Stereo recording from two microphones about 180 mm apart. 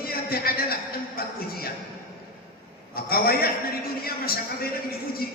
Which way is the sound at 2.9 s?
55° left (ahead or behind).